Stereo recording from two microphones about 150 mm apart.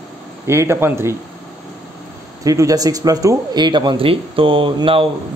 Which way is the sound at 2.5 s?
20° right (ahead or behind).